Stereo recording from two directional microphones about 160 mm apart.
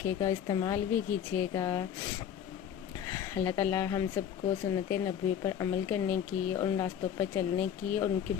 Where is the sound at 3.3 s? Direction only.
20° left (ahead or behind).